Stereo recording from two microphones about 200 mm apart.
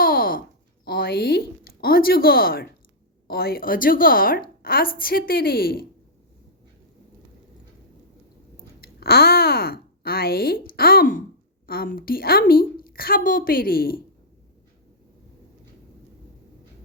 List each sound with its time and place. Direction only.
0.0 s a sound: 45° left (ahead or behind)
0.9 s a woman's voice: 50° left (ahead or behind)
8.8 s a woman's voice: 50° left (ahead or behind)